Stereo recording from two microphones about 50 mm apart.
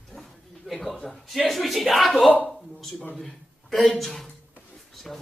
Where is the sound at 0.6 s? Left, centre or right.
Centre.